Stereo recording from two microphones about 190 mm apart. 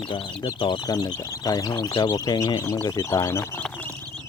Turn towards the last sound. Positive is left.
turn(degrees=10)  # may be behind; listen again after turning